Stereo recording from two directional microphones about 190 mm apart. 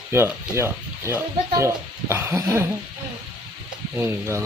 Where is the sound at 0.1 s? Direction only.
15° right (ahead or behind).